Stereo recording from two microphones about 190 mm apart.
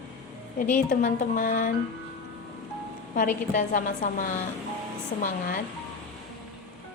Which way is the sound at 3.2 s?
45° left (ahead or behind).